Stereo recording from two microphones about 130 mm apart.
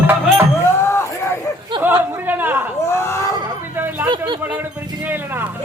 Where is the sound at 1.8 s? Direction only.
15° right (ahead or behind).